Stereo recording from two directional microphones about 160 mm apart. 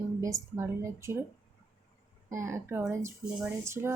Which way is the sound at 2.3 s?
20° right (ahead or behind).